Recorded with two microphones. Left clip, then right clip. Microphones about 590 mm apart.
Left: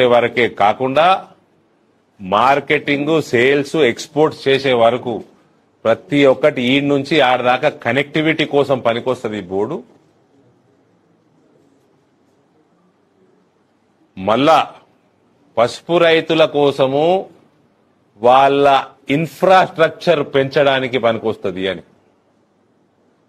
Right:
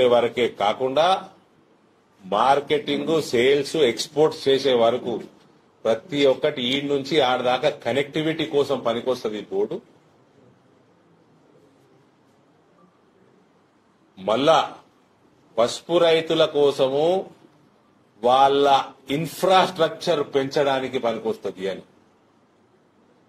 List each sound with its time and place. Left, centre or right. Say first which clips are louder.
0.0 s a man's voice: left 6 dB; left
2.2 s a man's voice: left 6 dB; left
14.2 s a man's voice: left 6 dB; left
18.2 s a man's voice: left 6 dB; left